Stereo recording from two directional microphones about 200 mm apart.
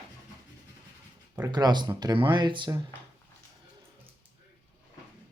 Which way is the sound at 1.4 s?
20° right (ahead or behind).